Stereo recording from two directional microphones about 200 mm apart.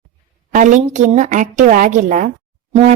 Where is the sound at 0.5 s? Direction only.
40° right (ahead or behind).